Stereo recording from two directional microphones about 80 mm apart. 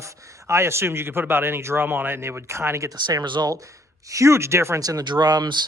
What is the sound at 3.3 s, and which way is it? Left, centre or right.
Speech, right.